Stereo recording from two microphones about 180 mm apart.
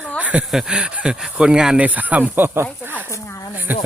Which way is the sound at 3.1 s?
15° left (ahead or behind).